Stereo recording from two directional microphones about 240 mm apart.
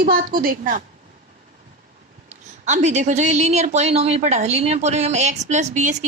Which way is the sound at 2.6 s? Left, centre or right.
Right.